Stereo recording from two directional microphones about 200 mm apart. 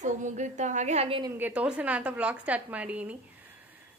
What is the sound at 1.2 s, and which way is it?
A woman's voice, 10° right (ahead or behind).